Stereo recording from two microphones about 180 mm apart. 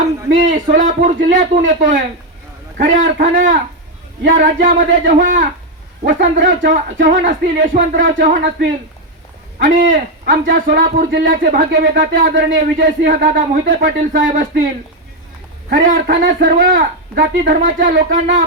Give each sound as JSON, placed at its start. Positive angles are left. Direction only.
{"t": 0.3, "sound": "speech", "side_deg": -50}
{"t": 15.7, "sound": "speech", "side_deg": -50}